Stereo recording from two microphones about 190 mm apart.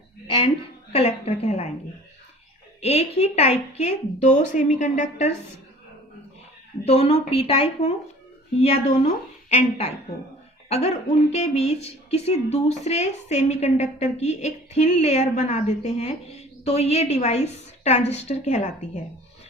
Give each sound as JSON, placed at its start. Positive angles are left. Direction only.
{"t": 0.3, "sound": "a sound", "side_deg": 30}
{"t": 0.9, "sound": "a woman's voice", "side_deg": 30}
{"t": 2.8, "sound": "a woman's voice", "side_deg": 30}
{"t": 6.8, "sound": "a woman's voice", "side_deg": 30}